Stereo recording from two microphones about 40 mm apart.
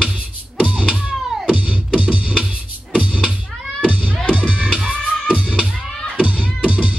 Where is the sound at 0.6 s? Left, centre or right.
Right.